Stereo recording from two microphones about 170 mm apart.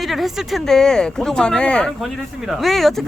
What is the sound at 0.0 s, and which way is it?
Speech, centre (ahead or behind).